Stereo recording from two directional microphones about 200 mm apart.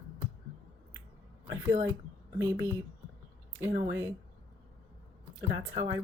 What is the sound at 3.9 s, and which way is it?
Speech, 15° right (ahead or behind).